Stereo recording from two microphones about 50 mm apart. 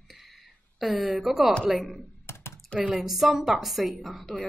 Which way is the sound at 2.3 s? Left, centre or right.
Left.